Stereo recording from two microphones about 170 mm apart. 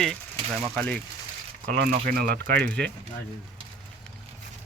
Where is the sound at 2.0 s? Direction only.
60° right (ahead or behind).